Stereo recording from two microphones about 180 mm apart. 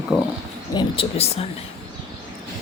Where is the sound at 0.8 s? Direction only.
30° left (ahead or behind).